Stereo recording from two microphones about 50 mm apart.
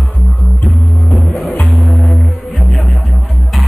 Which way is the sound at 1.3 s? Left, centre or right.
Left.